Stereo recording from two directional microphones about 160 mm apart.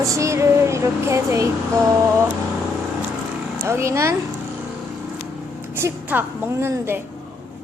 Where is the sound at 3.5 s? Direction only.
15° right (ahead or behind).